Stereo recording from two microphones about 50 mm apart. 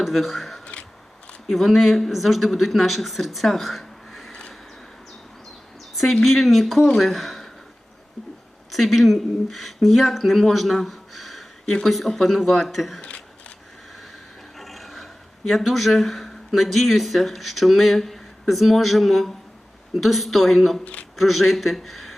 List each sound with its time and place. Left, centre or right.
0.0 s speech: centre
0.6 s a sound: left
1.5 s speech: centre
4.3 s a sound: centre
6.2 s speech: centre
8.7 s speech: centre
10.8 s a sound: centre
11.6 s speech: centre
11.9 s speech: centre
13.0 s shuffling cards: left
14.5 s speech: centre